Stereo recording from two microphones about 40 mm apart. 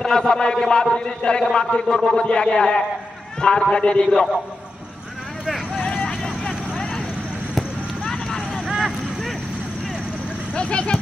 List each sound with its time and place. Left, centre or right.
0.0 s a man's voice: centre
6.0 s vehicle: left
8.4 s vehicle: centre
10.5 s speech: left